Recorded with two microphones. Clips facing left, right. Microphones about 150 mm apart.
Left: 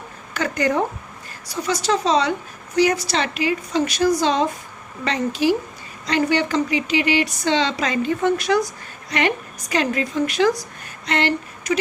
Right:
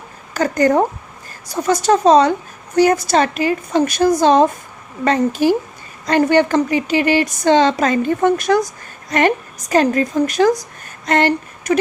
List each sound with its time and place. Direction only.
0.3 s speech: 40° right (ahead or behind)